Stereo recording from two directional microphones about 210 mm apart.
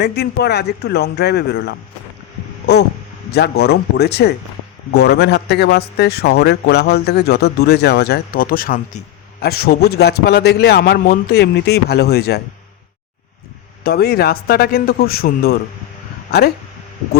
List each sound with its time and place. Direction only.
0.0 s speech: 50° left (ahead or behind)
3.3 s speech: 50° left (ahead or behind)
13.8 s speech: 50° left (ahead or behind)